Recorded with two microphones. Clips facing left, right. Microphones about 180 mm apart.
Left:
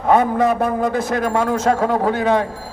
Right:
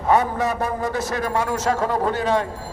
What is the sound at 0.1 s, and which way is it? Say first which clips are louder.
A man's voice: left 5 dB; 55° left (ahead or behind).